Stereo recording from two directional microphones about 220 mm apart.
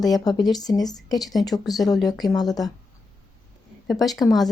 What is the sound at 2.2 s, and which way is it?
Speech, 15° left (ahead or behind).